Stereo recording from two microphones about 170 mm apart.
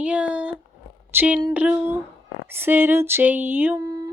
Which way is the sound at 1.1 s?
10° right (ahead or behind).